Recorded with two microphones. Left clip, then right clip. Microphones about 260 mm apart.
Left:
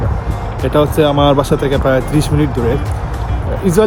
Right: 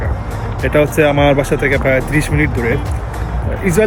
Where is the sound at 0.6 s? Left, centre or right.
Centre.